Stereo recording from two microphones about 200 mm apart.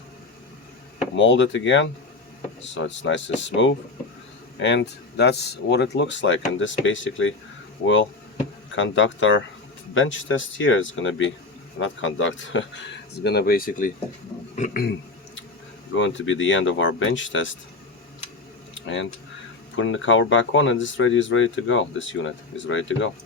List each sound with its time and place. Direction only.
1.1 s speech: 65° left (ahead or behind)
8.7 s speech: 70° left (ahead or behind); by 14.9 s 50° left (ahead or behind)
16.0 s speech: 70° left (ahead or behind)
18.7 s a sound: 70° left (ahead or behind)
19.7 s speech: 70° left (ahead or behind)